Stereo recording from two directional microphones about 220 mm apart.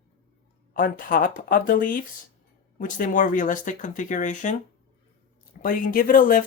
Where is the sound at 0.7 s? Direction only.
40° left (ahead or behind).